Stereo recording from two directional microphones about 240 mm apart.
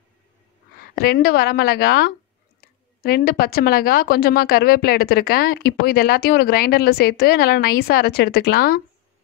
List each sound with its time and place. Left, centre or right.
0.7 s a woman's voice: left